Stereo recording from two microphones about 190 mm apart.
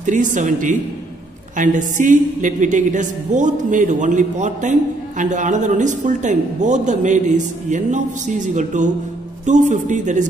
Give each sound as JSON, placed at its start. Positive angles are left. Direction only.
{"t": 0.0, "sound": "a woman's voice", "side_deg": -40}